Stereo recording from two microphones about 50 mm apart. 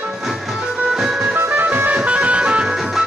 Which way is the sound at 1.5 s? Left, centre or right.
Right.